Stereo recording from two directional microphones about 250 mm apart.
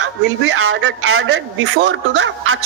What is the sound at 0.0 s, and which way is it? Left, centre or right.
A man's voice, right.